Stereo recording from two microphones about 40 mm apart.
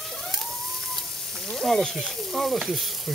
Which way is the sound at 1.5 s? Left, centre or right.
Centre.